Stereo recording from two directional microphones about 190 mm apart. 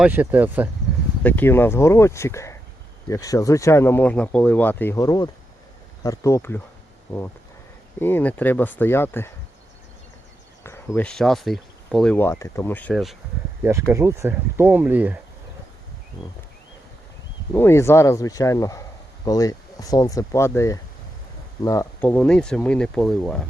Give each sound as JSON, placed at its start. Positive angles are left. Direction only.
{"t": 0.0, "sound": "speech", "side_deg": -10}
{"t": 1.2, "sound": "speech", "side_deg": 10}
{"t": 7.9, "sound": "speech", "side_deg": 10}
{"t": 10.6, "sound": "speech", "side_deg": 10}
{"t": 12.9, "sound": "speech", "side_deg": 0}
{"t": 13.6, "sound": "speech", "side_deg": -15}
{"t": 17.5, "sound": "speech", "side_deg": 10}